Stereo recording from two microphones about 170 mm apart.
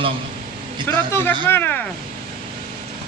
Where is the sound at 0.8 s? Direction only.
15° left (ahead or behind).